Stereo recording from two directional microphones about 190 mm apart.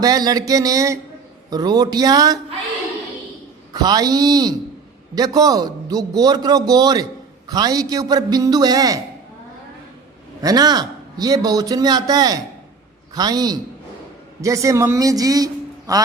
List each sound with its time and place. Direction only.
0.0 s a man's voice: 20° right (ahead or behind)
3.8 s a man's voice: 20° right (ahead or behind)
10.4 s a man's voice: 20° right (ahead or behind)